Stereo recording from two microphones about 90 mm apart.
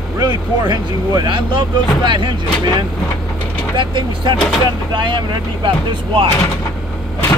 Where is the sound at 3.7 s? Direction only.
60° right (ahead or behind).